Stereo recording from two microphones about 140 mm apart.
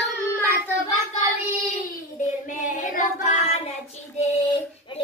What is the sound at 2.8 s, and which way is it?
Child singing, 70° left (ahead or behind).